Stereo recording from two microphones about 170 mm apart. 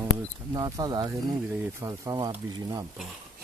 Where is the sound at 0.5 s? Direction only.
25° right (ahead or behind).